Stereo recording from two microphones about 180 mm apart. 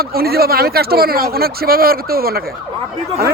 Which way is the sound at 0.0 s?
55° right (ahead or behind).